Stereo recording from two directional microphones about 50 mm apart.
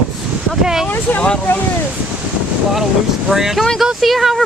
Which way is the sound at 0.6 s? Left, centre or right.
Centre.